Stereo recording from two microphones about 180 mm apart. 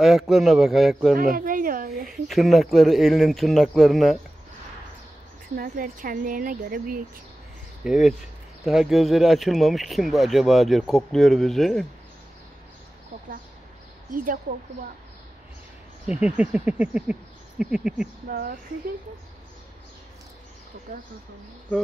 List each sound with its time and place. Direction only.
0.0 s speech: centre (ahead or behind)
1.3 s a sound: 50° right (ahead or behind)
2.0 s speech: centre (ahead or behind)
5.6 s speech: 50° right (ahead or behind)
7.8 s speech: centre (ahead or behind)
14.1 s speech: 50° right (ahead or behind)
16.1 s speech: 5° right (ahead or behind)
18.3 s speech: 55° right (ahead or behind)